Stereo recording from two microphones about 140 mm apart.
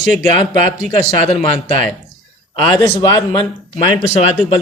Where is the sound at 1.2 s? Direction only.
45° left (ahead or behind).